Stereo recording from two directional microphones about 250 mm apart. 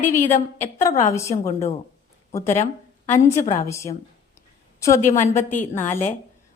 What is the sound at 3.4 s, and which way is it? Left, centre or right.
Speech, left.